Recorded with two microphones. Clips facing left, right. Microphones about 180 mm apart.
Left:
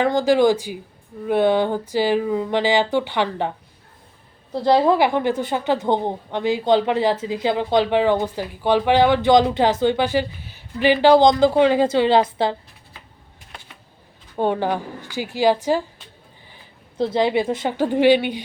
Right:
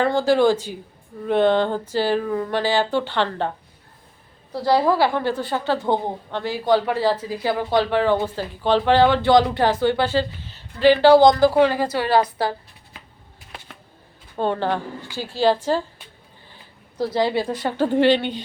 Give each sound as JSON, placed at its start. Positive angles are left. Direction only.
{"t": 0.0, "sound": "speech", "side_deg": 15}
{"t": 4.5, "sound": "a woman's voice", "side_deg": 20}
{"t": 14.3, "sound": "speech", "side_deg": 15}
{"t": 17.0, "sound": "speech", "side_deg": 20}